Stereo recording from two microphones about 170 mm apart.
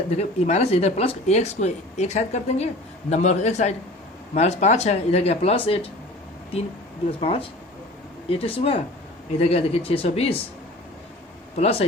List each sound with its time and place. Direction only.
0.2 s a man's voice: 40° left (ahead or behind)
7.1 s speech: 35° left (ahead or behind)
11.5 s speech: 40° left (ahead or behind)